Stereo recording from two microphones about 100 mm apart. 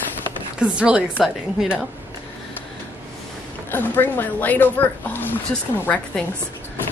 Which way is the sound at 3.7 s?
20° left (ahead or behind).